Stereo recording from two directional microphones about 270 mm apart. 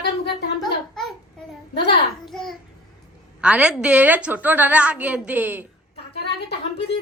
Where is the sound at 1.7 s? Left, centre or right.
Left.